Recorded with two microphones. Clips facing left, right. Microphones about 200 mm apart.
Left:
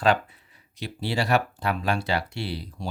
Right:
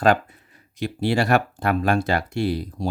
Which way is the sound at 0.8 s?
50° right (ahead or behind).